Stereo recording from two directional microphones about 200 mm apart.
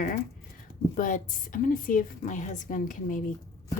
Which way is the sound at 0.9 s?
40° left (ahead or behind).